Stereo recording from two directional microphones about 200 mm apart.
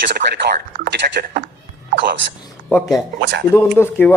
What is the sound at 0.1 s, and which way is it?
Speech, 55° right (ahead or behind).